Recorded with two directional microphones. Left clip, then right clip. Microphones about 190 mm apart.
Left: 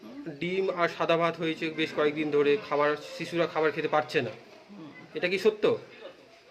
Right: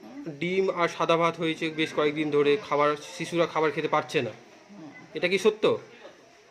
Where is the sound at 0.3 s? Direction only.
20° right (ahead or behind).